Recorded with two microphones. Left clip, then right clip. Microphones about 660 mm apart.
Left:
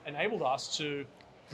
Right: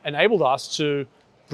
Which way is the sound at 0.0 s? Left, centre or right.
Right.